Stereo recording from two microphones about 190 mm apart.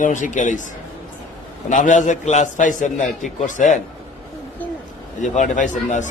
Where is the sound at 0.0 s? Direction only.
40° left (ahead or behind).